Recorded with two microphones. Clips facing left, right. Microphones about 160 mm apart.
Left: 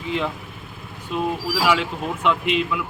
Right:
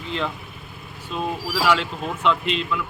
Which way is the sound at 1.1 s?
10° left (ahead or behind).